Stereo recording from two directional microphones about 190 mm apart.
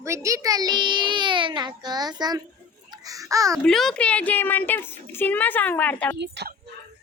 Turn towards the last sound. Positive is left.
turn(degrees=-65)  # may be behind; listen again after turning